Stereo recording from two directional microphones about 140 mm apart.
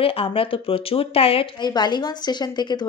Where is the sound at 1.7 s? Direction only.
30° left (ahead or behind).